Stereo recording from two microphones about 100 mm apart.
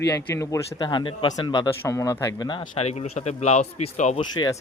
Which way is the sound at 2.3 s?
45° left (ahead or behind).